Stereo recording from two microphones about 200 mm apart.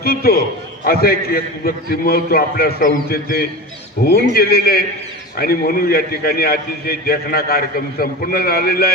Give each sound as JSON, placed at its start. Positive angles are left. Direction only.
{"t": 0.0, "sound": "a man's voice", "side_deg": 50}